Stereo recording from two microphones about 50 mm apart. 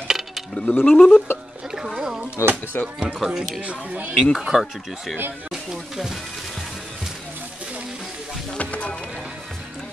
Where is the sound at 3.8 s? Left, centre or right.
Right.